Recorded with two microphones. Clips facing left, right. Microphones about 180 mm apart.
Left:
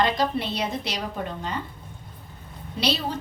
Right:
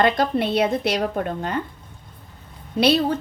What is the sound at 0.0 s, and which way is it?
A woman's voice, 55° right (ahead or behind).